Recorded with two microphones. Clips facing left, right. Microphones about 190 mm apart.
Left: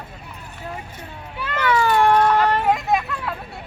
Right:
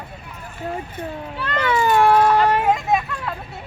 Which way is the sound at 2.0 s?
5° right (ahead or behind).